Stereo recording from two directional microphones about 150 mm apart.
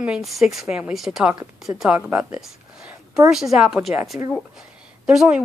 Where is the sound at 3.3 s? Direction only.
5° right (ahead or behind).